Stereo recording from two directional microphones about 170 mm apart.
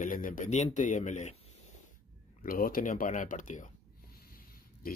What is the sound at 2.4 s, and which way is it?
Speech, 55° left (ahead or behind).